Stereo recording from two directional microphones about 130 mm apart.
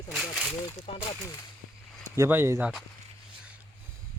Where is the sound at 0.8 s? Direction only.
40° left (ahead or behind).